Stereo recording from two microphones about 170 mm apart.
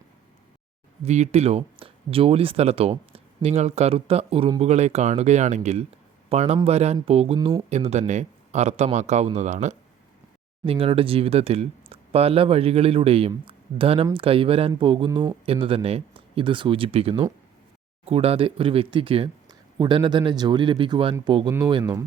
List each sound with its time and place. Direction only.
1.0 s a man's voice: 40° right (ahead or behind)
10.7 s speech: 35° right (ahead or behind)